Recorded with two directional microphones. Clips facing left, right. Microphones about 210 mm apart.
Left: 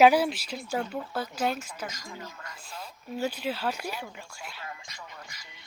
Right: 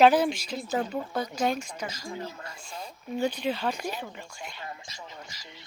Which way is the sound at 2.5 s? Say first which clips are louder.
Right 2 dB; 5° left (ahead or behind).